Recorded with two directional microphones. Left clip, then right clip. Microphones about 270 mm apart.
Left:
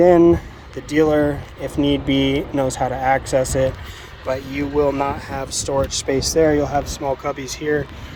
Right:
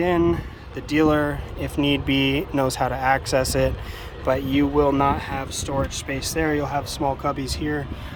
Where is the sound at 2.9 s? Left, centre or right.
Centre.